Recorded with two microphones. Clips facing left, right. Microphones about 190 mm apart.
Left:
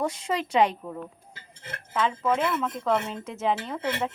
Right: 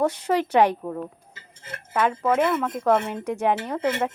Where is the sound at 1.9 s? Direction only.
60° right (ahead or behind).